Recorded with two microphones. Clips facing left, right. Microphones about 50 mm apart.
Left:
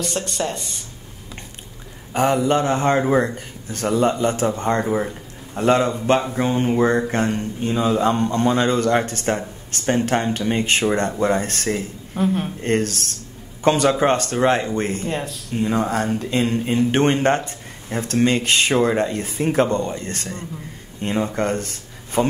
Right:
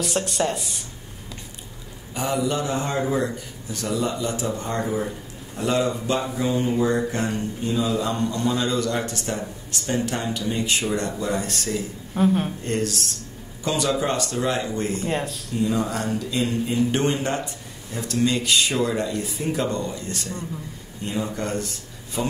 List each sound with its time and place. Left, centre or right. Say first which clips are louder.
0.0 s speech: right 1 dB; centre
2.1 s a man's voice: left 6 dB; left
12.1 s speech: right 1 dB; centre
12.6 s speech: left 4 dB; left
15.0 s speech: even; centre
15.5 s speech: left 3 dB; left